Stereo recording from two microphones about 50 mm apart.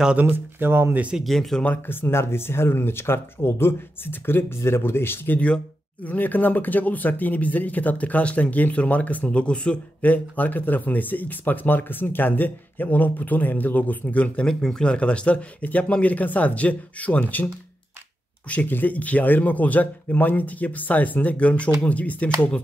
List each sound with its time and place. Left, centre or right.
0.2 s speech: right
1.2 s speech: centre
1.9 s speech: left
4.6 s speech: left
6.0 s speech: left
10.0 s speech: left
14.5 s speech: centre; by 17.5 s left
18.5 s speech: left